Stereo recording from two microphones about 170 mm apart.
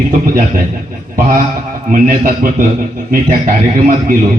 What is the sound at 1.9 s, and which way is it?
A man's voice, 55° right (ahead or behind).